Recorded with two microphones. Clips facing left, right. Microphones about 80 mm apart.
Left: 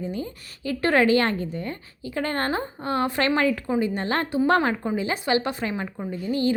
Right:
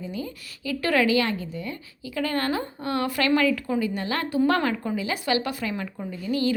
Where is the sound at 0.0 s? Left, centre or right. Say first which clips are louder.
Left 2 dB; left.